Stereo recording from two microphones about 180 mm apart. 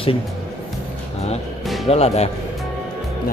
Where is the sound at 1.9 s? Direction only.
35° left (ahead or behind).